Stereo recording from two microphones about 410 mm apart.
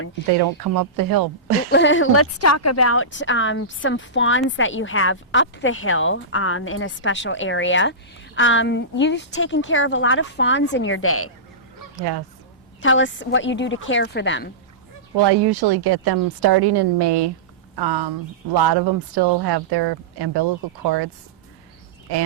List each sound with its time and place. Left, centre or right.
0.3 s speech: right
1.7 s speech: left
11.9 s speech: right
12.8 s speech: left
15.1 s speech: right